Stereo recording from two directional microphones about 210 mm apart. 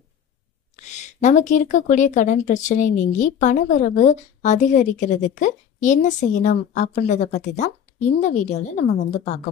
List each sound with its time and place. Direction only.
0.9 s speech: 35° left (ahead or behind)